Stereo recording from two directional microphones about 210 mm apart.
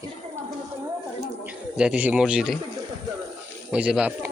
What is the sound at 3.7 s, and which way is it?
Speech, 5° right (ahead or behind).